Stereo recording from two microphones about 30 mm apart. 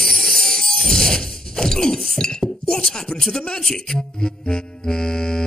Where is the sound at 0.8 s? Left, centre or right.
Centre.